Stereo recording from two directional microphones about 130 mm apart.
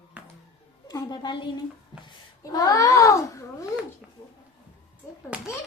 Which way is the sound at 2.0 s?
30° left (ahead or behind).